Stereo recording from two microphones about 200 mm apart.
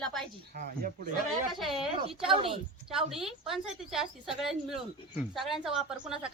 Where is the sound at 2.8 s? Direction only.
Centre (ahead or behind).